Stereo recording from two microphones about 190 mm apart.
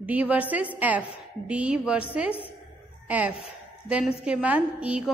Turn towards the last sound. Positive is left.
turn(degrees=-5)  # may be behind; listen again after turning